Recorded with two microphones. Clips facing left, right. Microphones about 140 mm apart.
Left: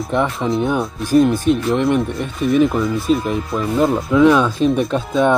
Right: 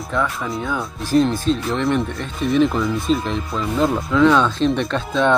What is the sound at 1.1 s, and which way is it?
Speech, 10° left (ahead or behind).